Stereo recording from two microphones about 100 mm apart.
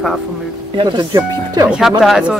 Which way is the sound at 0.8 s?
50° right (ahead or behind).